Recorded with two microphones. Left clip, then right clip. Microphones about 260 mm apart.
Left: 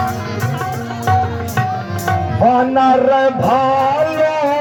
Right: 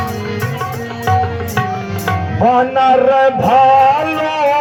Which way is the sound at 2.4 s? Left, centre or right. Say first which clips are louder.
Right 1 dB; right.